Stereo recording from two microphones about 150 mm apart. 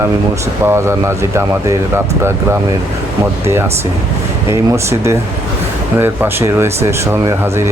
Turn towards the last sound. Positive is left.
turn(degrees=-15)  # may be behind; listen again after turning